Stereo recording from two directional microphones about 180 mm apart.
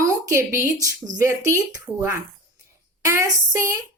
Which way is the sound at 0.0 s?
15° right (ahead or behind).